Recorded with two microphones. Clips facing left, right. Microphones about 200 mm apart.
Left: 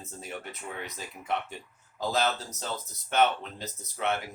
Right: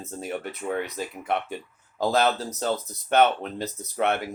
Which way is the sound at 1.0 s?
65° right (ahead or behind).